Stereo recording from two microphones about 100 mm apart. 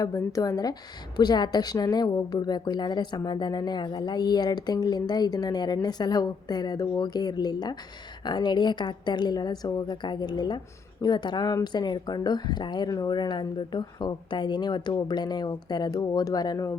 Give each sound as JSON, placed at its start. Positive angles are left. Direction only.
{"t": 0.0, "sound": "a woman's voice", "side_deg": 35}